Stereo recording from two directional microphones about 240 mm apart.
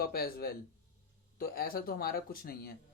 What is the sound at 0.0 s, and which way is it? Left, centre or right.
Speech, left.